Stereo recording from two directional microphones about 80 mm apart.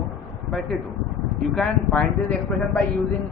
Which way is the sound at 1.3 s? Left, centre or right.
Centre.